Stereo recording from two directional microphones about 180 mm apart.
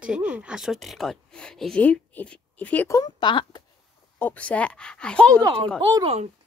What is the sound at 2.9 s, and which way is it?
Speech, 20° left (ahead or behind).